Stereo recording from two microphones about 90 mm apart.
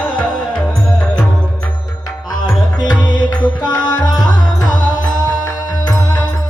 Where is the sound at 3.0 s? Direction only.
55° left (ahead or behind).